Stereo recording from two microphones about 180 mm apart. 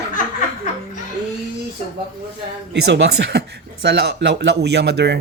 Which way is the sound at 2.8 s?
75° right (ahead or behind).